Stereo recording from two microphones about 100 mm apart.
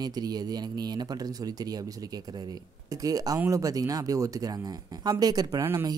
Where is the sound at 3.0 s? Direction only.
35° right (ahead or behind).